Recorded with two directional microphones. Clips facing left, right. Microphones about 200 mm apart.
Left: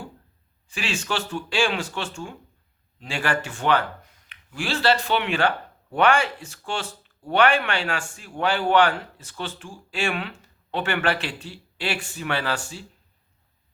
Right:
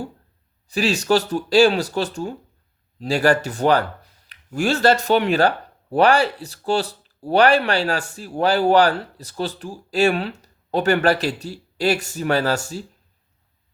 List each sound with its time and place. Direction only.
0.7 s speech: 40° right (ahead or behind)